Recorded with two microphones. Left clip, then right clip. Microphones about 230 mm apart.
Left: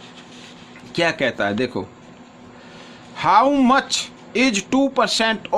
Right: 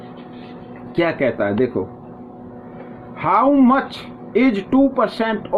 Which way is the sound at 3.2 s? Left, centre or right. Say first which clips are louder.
Even; left.